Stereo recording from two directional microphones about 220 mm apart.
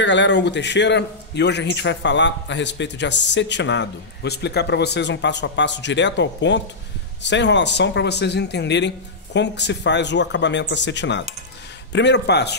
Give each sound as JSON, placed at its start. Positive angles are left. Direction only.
{"t": 0.0, "sound": "a man's voice", "side_deg": 55}